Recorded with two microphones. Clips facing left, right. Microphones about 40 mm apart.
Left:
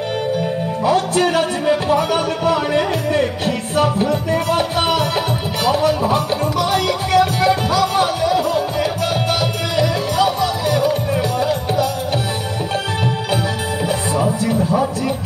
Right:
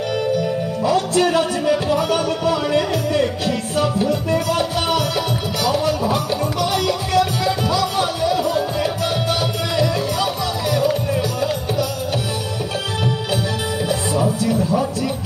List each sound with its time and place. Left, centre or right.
0.8 s music: left
14.2 s music: left